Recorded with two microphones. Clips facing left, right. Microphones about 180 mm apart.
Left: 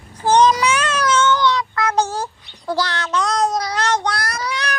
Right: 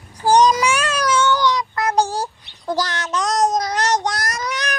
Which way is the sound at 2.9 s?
20° right (ahead or behind).